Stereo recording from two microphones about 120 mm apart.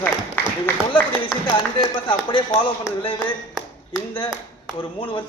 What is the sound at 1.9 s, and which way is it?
Speech, 45° left (ahead or behind).